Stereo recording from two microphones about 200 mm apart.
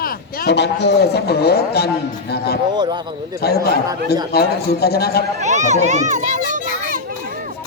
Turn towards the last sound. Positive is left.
turn(degrees=-40)  # may be behind; listen again after turning